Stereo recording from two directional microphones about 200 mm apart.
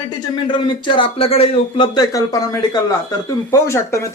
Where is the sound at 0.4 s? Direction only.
25° left (ahead or behind).